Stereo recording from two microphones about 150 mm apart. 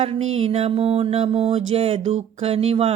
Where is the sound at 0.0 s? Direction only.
45° right (ahead or behind).